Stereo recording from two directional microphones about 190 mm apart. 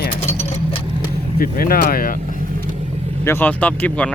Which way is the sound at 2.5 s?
40° right (ahead or behind).